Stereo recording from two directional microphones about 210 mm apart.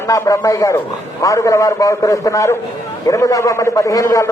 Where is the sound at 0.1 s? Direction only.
15° left (ahead or behind).